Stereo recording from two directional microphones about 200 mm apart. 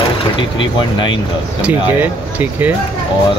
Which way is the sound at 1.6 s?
10° right (ahead or behind).